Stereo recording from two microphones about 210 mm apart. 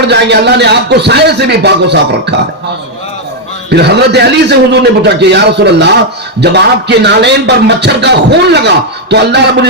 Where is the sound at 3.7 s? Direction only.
50° right (ahead or behind).